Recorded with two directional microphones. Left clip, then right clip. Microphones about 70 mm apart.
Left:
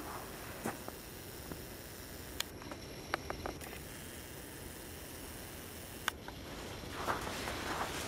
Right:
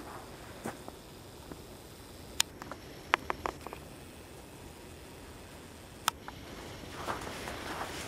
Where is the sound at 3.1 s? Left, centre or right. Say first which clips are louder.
Right 9 dB; right.